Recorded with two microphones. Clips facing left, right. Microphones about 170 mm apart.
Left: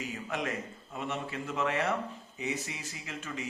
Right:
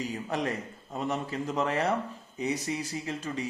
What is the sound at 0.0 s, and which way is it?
A man's voice, 35° right (ahead or behind).